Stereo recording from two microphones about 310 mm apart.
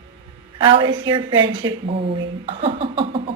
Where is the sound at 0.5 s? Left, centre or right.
Centre.